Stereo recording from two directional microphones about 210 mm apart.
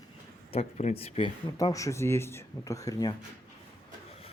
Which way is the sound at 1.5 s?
15° left (ahead or behind).